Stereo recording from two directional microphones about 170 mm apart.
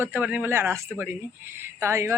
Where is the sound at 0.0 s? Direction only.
10° right (ahead or behind).